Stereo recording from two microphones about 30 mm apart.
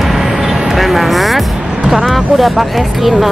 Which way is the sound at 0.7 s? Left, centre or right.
Centre.